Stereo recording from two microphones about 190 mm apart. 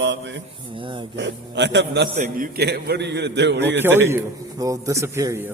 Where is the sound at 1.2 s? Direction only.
65° right (ahead or behind).